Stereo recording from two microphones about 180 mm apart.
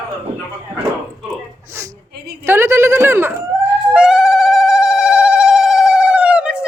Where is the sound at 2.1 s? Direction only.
60° right (ahead or behind).